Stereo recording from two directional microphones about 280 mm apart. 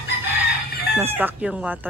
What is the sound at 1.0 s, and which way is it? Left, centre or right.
Speech, centre.